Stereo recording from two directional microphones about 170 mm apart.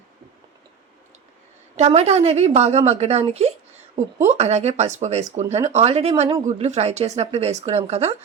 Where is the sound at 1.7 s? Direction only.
40° right (ahead or behind).